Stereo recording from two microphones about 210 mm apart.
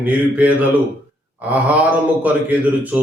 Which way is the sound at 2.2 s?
5° right (ahead or behind).